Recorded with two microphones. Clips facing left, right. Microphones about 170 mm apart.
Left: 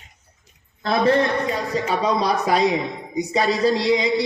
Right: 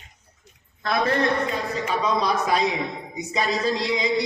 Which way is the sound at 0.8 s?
30° left (ahead or behind).